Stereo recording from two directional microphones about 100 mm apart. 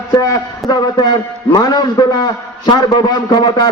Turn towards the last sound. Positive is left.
turn(degrees=45)  # may be behind; listen again after turning